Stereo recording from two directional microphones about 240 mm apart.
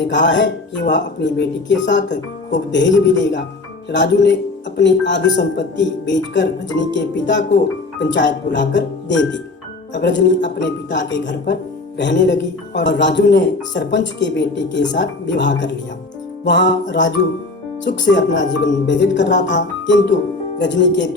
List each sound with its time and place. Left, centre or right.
0.1 s speech: left
3.9 s speech: left